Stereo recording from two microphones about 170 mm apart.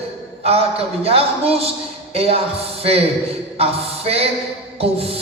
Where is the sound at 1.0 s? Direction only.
35° right (ahead or behind).